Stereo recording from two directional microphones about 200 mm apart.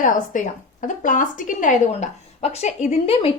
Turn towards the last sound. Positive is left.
turn(degrees=30)  # may be behind; listen again after turning